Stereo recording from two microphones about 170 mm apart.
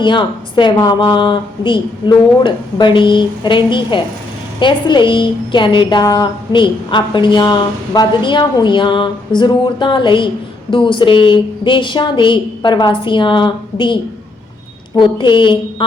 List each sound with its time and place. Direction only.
0.0 s a woman's voice: 25° left (ahead or behind)